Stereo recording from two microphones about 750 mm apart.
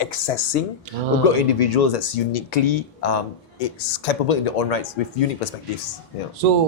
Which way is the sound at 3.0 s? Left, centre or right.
Left.